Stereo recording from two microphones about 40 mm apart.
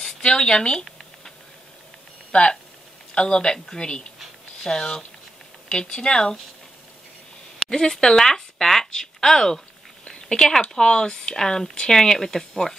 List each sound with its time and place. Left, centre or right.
0.0 s speech: left
2.3 s speech: left
7.5 s speech: centre
8.2 s speech: centre